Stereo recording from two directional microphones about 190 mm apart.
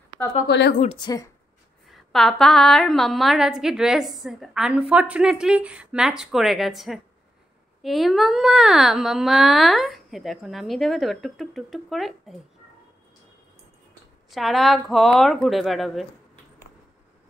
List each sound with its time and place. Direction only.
0.5 s a woman's voice: 70° left (ahead or behind)
0.9 s speech: 20° left (ahead or behind)
1.9 s a woman's voice: centre (ahead or behind)
14.3 s a woman's voice: centre (ahead or behind)